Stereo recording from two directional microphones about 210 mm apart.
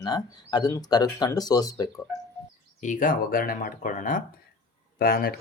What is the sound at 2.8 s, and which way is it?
Speech, 40° left (ahead or behind).